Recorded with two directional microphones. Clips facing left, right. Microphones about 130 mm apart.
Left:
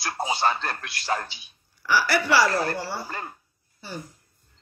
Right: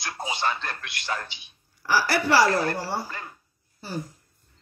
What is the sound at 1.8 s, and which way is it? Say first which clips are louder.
Speech: even; 35° right (ahead or behind).